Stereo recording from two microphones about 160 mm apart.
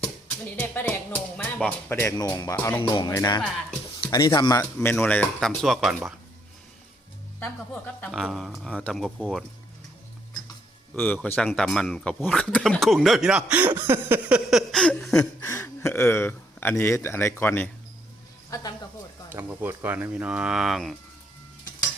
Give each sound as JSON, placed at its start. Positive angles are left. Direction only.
{"t": 0.3, "sound": "speech", "side_deg": 10}
{"t": 2.8, "sound": "speech", "side_deg": 30}
{"t": 4.8, "sound": "speech", "side_deg": 10}
{"t": 7.3, "sound": "speech", "side_deg": 10}
{"t": 8.1, "sound": "speech", "side_deg": 0}
{"t": 10.9, "sound": "speech", "side_deg": 10}
{"t": 15.4, "sound": "speech", "side_deg": 20}
{"t": 19.3, "sound": "speech", "side_deg": -10}